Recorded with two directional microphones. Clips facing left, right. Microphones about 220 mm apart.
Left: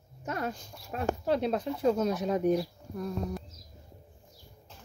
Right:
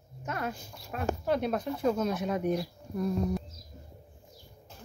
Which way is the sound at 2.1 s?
35° left (ahead or behind).